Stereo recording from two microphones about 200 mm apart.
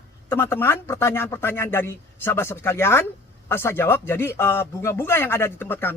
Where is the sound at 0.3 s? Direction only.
10° left (ahead or behind).